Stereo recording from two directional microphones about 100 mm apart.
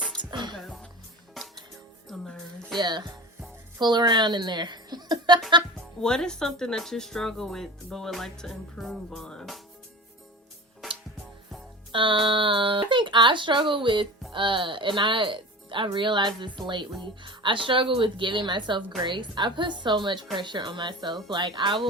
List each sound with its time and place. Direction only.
0.2 s music: 50° right (ahead or behind)
0.5 s music: 5° left (ahead or behind)
2.7 s music: 50° right (ahead or behind)
3.8 s speech: 45° right (ahead or behind)
6.0 s speech: 5° left (ahead or behind)
11.9 s a woman's voice: 60° right (ahead or behind)